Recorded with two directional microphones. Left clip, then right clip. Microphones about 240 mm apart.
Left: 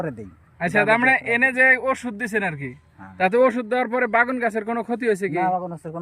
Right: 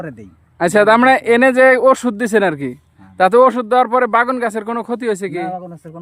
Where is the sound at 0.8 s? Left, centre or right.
Centre.